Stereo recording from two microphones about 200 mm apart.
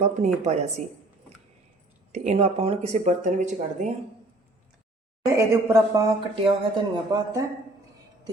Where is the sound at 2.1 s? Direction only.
30° right (ahead or behind).